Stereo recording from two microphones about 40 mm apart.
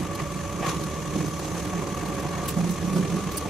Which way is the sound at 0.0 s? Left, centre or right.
Centre.